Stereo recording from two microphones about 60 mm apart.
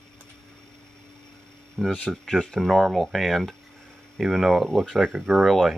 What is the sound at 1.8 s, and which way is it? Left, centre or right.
Speech, centre.